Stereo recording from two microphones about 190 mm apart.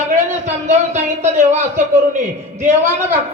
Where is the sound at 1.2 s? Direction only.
35° right (ahead or behind).